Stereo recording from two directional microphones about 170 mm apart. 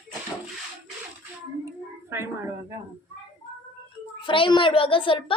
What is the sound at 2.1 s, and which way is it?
Speech, 15° right (ahead or behind).